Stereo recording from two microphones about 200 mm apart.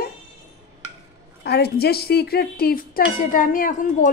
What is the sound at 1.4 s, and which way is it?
A woman's voice, 55° left (ahead or behind).